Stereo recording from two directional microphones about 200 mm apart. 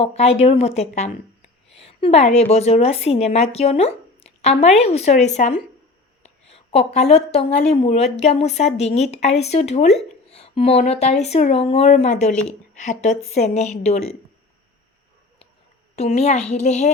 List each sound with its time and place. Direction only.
0.0 s a woman's voice: 30° left (ahead or behind)
16.0 s a woman's voice: 35° left (ahead or behind)